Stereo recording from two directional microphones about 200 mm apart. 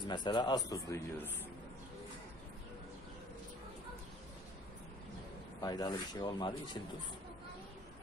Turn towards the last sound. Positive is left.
turn(degrees=20)  # may be behind; listen again after turning